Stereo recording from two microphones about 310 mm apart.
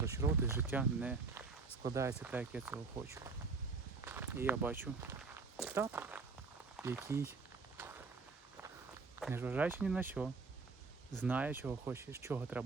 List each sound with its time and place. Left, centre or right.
0.0 s speech: centre
9.2 s speech: centre